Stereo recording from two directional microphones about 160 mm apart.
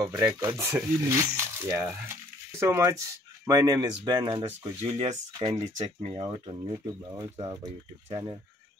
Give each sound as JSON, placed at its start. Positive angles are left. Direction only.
{"t": 0.0, "sound": "speech", "side_deg": -25}